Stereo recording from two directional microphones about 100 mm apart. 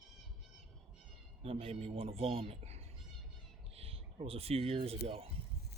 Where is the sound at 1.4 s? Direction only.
70° right (ahead or behind); by 2.8 s 90° right.